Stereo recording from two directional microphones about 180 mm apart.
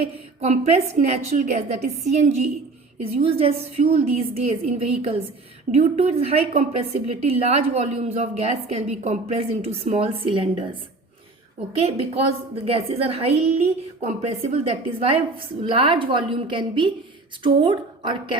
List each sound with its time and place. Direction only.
0.0 s a woman's voice: 35° right (ahead or behind)